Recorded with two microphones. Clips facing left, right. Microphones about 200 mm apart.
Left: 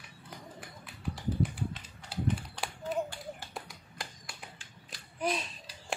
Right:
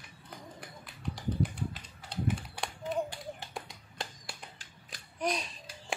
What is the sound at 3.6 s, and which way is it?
Music, 25° right (ahead or behind).